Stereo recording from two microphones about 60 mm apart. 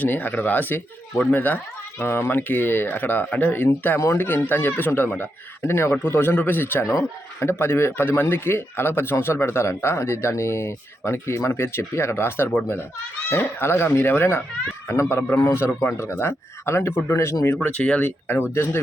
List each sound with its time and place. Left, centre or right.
0.0 s a man's voice: left
2.0 s a man's voice: left
3.9 s speech: left
4.3 s a man's voice: left
5.6 s a man's voice: left
17.6 s speech: left
18.0 s a man's voice: left